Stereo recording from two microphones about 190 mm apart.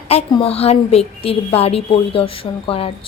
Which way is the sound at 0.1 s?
30° left (ahead or behind).